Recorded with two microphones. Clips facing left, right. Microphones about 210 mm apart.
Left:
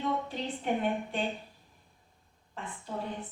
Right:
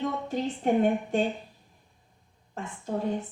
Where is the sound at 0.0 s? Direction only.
45° right (ahead or behind).